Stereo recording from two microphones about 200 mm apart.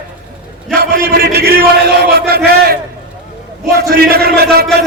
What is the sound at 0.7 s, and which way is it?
Chant, 50° right (ahead or behind).